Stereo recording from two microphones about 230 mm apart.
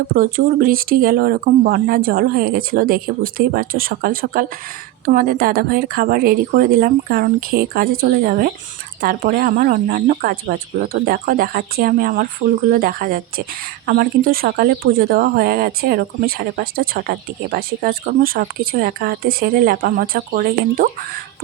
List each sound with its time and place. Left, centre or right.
0.1 s speech: right